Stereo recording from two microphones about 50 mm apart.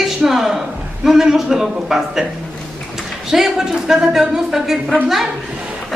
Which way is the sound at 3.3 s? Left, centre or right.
Centre.